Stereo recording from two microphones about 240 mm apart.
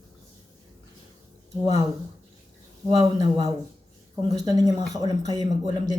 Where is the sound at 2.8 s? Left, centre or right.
Centre.